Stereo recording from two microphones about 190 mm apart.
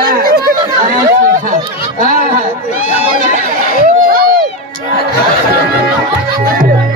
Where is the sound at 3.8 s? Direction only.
50° right (ahead or behind).